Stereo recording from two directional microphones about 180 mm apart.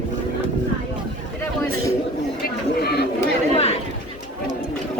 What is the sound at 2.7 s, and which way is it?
Chatter, 60° left (ahead or behind).